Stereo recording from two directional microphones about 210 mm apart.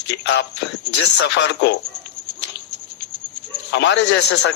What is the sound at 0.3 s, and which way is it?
A man's voice, 55° left (ahead or behind).